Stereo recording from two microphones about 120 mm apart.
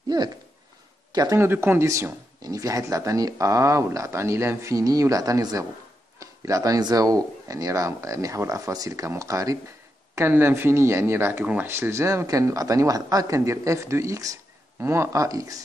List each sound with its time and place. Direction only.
1.1 s speech: 35° right (ahead or behind)
1.4 s speech: 20° right (ahead or behind)